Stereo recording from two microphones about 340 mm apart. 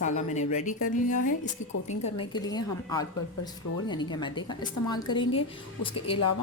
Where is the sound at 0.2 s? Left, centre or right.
Left.